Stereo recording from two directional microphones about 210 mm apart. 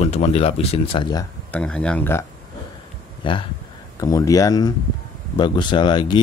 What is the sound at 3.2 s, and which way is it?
Speech, 25° left (ahead or behind).